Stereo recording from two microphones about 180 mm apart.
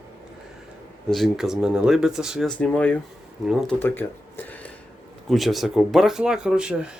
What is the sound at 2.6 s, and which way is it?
Speech, 5° left (ahead or behind).